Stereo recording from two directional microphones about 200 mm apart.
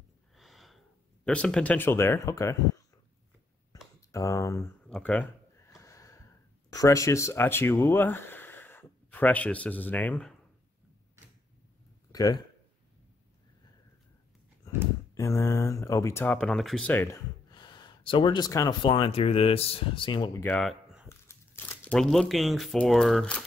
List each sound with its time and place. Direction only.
0.4 s gasp: centre (ahead or behind); by 2.5 s 15° left (ahead or behind)
3.7 s a sound: 15° left (ahead or behind)
4.1 s speech: 15° left (ahead or behind)
4.8 s a sound: 5° left (ahead or behind)
5.8 s snort: 15° left (ahead or behind)
6.7 s speech: 15° left (ahead or behind)
12.1 s speech: 20° left (ahead or behind)
15.1 s speech: 15° left (ahead or behind)
17.5 s speech: 20° left (ahead or behind)
20.6 s a sound: 5° right (ahead or behind)
21.1 s speech: 10° left (ahead or behind)